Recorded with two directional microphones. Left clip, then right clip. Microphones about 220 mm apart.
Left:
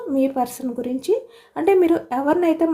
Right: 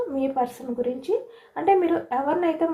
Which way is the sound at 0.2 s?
55° left (ahead or behind).